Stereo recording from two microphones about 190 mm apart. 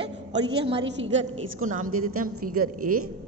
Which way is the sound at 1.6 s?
45° right (ahead or behind).